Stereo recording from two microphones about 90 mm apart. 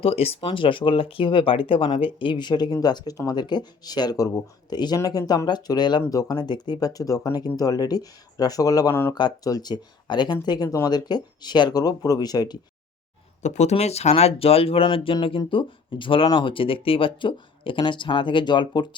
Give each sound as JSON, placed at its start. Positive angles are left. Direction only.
{"t": 0.0, "sound": "speech", "side_deg": 90}
{"t": 2.0, "sound": "speech", "side_deg": 75}
{"t": 8.9, "sound": "speech", "side_deg": 30}
{"t": 9.1, "sound": "speech", "side_deg": 50}
{"t": 14.3, "sound": "speech", "side_deg": 90}